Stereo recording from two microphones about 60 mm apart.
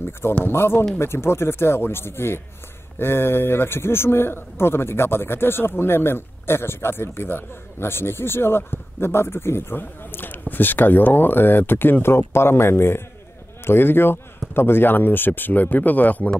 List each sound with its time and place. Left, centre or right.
0.5 s a man's voice: left